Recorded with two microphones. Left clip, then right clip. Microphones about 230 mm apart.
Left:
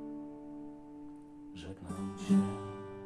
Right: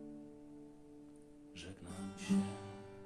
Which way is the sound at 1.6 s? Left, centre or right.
Left.